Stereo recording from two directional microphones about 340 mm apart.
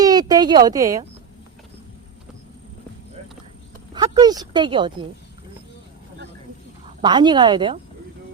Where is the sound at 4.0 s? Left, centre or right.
Centre.